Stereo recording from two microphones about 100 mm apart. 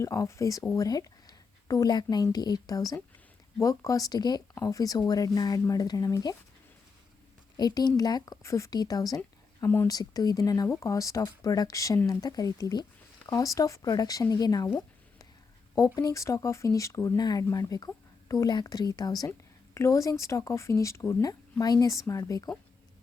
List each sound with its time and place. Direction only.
0.0 s speech: 30° left (ahead or behind)
7.5 s speech: 40° left (ahead or behind)
16.0 s speech: 35° left (ahead or behind)
19.7 s speech: 30° left (ahead or behind)